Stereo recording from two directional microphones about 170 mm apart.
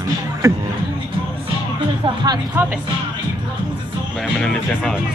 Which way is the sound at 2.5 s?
10° right (ahead or behind).